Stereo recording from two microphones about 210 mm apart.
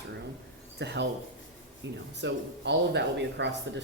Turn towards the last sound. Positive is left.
turn(degrees=-55)  # may be behind; listen again after turning